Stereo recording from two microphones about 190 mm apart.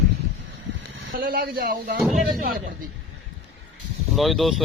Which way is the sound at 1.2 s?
50° right (ahead or behind).